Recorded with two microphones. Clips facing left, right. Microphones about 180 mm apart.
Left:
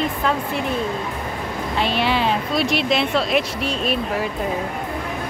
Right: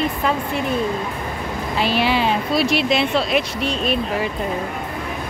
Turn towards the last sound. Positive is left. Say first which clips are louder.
# right 1 dB
turn(degrees=0)  # may be behind; listen again after turning